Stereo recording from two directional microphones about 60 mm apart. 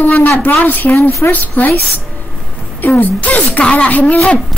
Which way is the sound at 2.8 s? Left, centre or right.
Left.